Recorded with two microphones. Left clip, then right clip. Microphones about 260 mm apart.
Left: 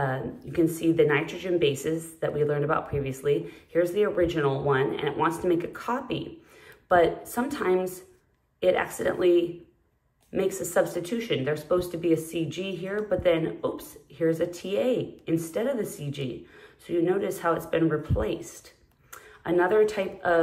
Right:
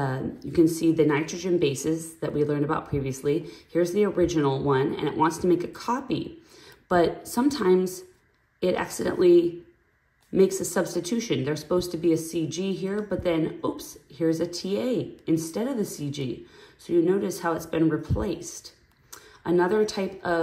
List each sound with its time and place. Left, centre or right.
0.0 s speech: right
19.0 s a sound: right
19.9 s speech: centre